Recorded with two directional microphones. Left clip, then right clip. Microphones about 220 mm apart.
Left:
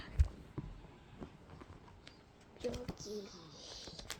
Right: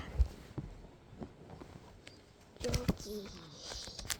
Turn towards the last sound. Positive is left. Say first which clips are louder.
# right 5 dB
turn(degrees=-35)  # may be behind; listen again after turning